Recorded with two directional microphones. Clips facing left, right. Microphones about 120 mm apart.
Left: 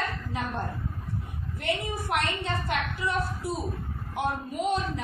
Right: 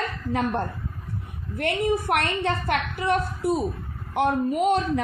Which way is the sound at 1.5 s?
60° right (ahead or behind).